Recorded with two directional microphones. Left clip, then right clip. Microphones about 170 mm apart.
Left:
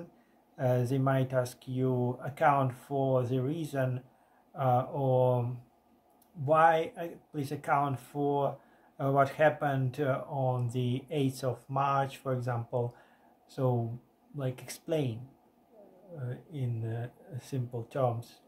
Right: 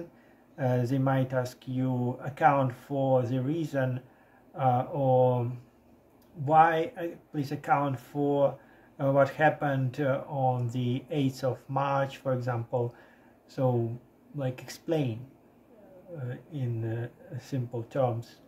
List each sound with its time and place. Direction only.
0.6 s speech: 15° left (ahead or behind)
6.4 s speech: 15° left (ahead or behind)
16.3 s speech: 15° left (ahead or behind)